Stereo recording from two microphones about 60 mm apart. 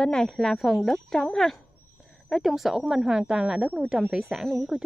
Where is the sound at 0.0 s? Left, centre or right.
Centre.